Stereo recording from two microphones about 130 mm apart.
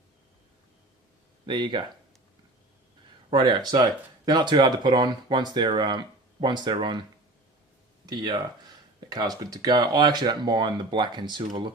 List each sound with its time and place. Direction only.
1.5 s speech: 35° right (ahead or behind)
3.2 s speech: 35° right (ahead or behind)
8.0 s speech: 35° right (ahead or behind)